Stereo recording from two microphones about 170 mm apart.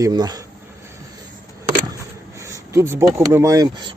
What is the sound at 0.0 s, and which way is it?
Speech, 25° right (ahead or behind).